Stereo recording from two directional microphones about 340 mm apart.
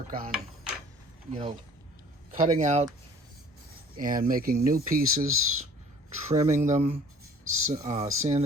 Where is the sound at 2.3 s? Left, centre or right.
Right.